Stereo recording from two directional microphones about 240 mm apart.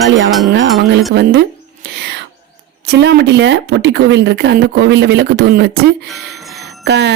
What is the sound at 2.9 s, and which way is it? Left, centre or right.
Speech, right.